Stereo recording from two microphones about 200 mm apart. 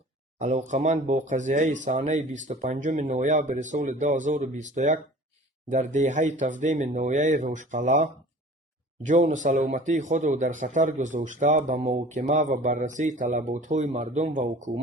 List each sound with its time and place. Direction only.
0.3 s speech: 35° right (ahead or behind)